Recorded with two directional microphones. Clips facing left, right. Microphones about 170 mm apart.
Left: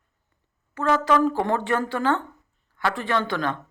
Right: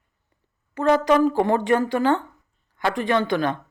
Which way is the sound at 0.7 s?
15° right (ahead or behind).